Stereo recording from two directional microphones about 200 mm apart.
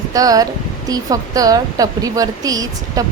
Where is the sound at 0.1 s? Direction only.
20° right (ahead or behind).